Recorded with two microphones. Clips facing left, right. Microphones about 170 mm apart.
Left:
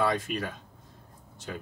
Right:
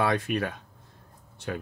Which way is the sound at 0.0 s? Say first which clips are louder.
Right 2 dB; 60° right (ahead or behind).